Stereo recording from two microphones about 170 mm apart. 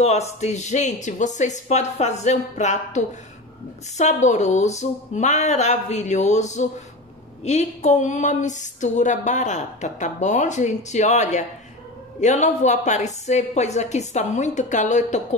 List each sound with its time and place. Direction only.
0.0 s speech: 40° left (ahead or behind)